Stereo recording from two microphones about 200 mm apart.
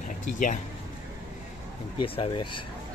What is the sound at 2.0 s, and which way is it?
Speech, 25° left (ahead or behind).